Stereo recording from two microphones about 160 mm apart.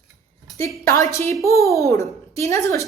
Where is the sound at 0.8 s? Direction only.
15° left (ahead or behind).